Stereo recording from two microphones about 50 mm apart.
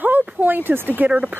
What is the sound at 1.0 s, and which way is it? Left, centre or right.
Speech, right.